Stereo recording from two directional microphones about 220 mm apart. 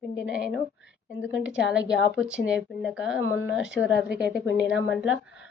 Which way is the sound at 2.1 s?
5° right (ahead or behind).